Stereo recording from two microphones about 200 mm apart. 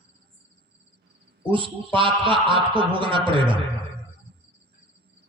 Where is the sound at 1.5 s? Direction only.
25° right (ahead or behind).